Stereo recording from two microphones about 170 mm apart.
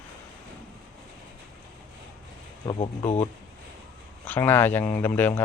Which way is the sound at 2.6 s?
30° left (ahead or behind).